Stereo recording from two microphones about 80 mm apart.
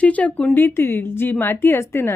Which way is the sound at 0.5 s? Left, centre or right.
Left.